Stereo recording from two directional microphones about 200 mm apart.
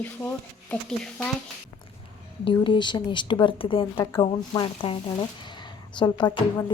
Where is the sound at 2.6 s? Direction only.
25° left (ahead or behind).